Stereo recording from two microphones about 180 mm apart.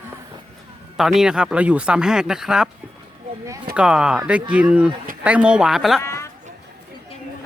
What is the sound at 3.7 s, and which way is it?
Speech, 5° right (ahead or behind).